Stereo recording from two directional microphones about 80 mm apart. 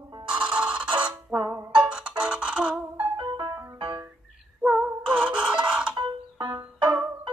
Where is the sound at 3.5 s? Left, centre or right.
Right.